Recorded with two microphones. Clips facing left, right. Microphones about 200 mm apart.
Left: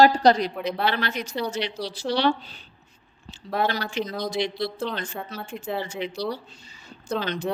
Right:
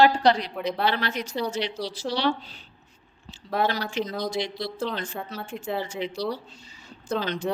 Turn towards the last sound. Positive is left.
turn(degrees=0)  # may be behind; listen again after turning